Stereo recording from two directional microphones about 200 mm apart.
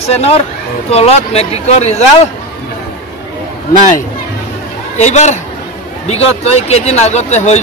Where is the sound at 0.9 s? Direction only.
30° left (ahead or behind).